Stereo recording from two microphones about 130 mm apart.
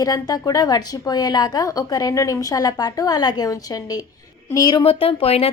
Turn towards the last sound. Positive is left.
turn(degrees=50)  # may be behind; listen again after turning